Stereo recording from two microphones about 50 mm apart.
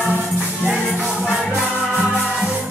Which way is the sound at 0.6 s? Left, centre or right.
Centre.